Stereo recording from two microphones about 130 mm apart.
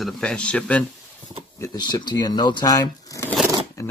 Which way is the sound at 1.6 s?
30° left (ahead or behind).